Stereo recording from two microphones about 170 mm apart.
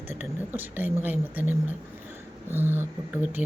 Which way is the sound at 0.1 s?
10° right (ahead or behind).